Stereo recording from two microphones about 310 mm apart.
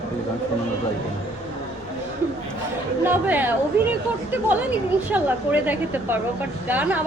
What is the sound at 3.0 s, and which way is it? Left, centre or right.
A woman's voice, centre.